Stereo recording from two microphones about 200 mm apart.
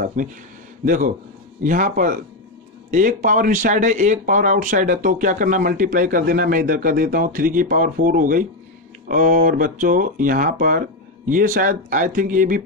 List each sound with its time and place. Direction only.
0.0 s speech: 40° right (ahead or behind)